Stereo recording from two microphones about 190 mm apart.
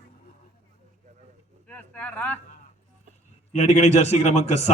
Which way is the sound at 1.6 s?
5° left (ahead or behind).